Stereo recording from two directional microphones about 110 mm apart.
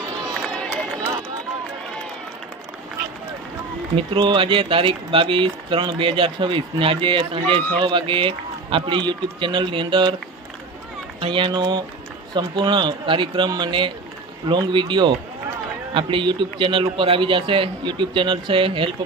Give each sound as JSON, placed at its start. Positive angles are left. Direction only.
{"t": 3.9, "sound": "speech", "side_deg": -45}
{"t": 11.2, "sound": "speech", "side_deg": -50}